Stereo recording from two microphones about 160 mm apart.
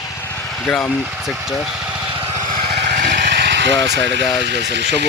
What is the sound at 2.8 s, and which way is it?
Vehicle, 60° right (ahead or behind).